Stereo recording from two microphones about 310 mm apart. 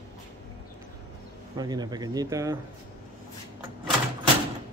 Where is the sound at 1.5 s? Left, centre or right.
Centre.